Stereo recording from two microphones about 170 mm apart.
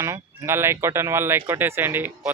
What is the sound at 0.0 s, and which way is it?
Speech, 15° right (ahead or behind).